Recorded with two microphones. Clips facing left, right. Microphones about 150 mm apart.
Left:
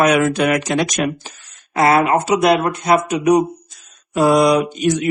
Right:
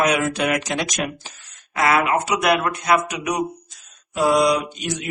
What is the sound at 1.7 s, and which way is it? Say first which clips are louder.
Speech: left 5 dB; 35° left (ahead or behind).